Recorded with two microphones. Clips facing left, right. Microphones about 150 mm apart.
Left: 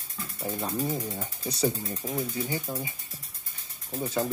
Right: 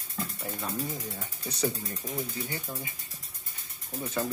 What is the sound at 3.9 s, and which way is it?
Speech, 25° left (ahead or behind).